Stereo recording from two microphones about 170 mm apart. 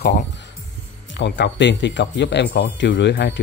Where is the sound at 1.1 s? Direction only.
85° left.